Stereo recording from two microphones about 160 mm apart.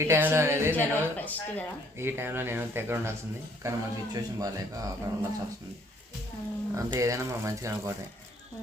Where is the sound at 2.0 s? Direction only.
15° right (ahead or behind).